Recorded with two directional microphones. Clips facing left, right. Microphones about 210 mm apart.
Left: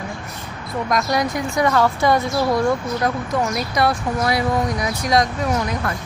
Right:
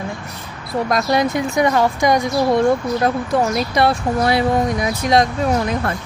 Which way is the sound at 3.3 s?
30° right (ahead or behind).